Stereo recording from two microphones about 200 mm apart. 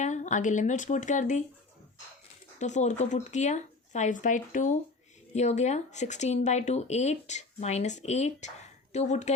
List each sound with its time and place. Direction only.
0.0 s speech: 35° left (ahead or behind)
2.6 s speech: 35° left (ahead or behind)